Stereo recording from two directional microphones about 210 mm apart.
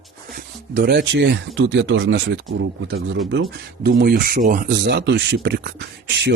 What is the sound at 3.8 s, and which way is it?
Speech, 50° right (ahead or behind).